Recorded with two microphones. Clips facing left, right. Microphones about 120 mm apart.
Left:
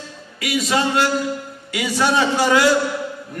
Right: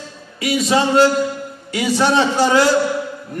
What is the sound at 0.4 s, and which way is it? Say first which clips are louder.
A man's voice: right 3 dB; 30° right (ahead or behind).